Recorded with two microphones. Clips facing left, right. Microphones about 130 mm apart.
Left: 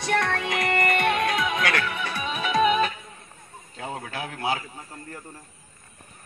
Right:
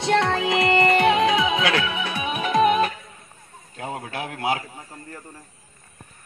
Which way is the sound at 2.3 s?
50° right (ahead or behind).